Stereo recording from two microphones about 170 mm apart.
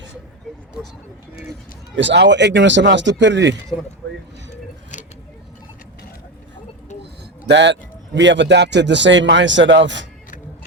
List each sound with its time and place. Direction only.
2.0 s a man's voice: 90° right
6.9 s a sound: 40° left (ahead or behind)
7.4 s a man's voice: 90° right